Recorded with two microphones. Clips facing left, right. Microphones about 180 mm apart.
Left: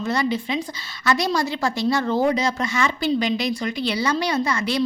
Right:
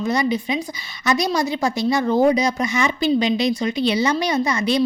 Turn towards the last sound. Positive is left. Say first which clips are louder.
# right 3 dB
turn(degrees=-20)  # may be behind; listen again after turning